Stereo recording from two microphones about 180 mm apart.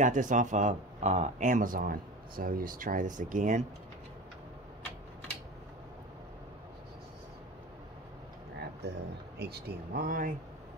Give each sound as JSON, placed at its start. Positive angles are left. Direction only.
{"t": 0.0, "sound": "speech", "side_deg": -45}
{"t": 8.8, "sound": "speech", "side_deg": -65}